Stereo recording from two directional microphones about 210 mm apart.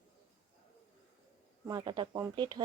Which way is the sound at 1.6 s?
20° right (ahead or behind).